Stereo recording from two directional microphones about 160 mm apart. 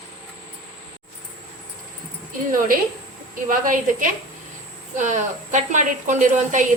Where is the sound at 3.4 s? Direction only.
55° right (ahead or behind).